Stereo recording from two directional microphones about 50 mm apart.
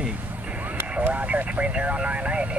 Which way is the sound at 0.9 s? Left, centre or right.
Right.